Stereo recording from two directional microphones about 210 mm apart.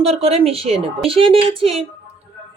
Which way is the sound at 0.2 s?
30° right (ahead or behind).